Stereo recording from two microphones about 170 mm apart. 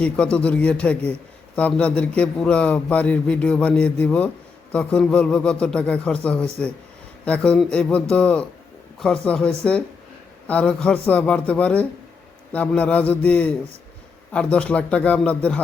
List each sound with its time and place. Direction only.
0.0 s a man's voice: 5° left (ahead or behind)